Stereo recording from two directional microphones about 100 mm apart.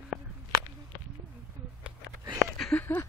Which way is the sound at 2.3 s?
5° left (ahead or behind).